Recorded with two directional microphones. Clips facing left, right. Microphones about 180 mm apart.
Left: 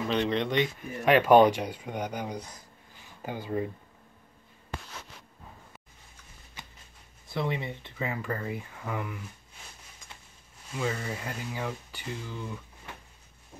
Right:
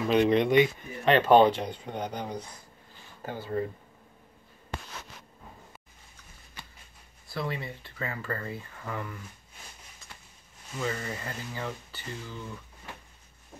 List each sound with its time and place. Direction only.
0.1 s speech: 10° right (ahead or behind)
0.7 s speech: 10° left (ahead or behind)
6.6 s a sound: 20° left (ahead or behind)
7.2 s speech: 20° left (ahead or behind)
10.8 s speech: 5° left (ahead or behind)